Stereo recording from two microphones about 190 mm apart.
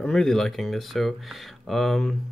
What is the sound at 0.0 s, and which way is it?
Speech, 5° left (ahead or behind).